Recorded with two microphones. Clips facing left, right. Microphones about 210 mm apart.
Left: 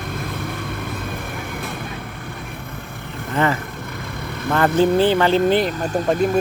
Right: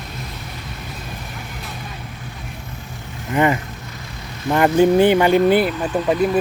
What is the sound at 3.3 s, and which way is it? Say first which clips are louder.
Speech: right 3 dB; 15° right (ahead or behind).